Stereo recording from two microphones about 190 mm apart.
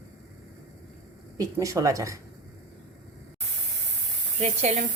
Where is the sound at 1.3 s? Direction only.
15° right (ahead or behind).